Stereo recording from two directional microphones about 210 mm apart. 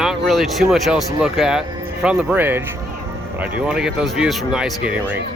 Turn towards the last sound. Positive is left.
turn(degrees=-5)  # may be behind; listen again after turning